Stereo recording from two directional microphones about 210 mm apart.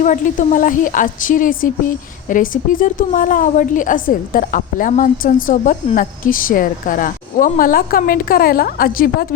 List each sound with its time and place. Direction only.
0.0 s a woman's voice: 35° left (ahead or behind)